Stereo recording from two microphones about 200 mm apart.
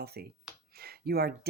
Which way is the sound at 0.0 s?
50° right (ahead or behind).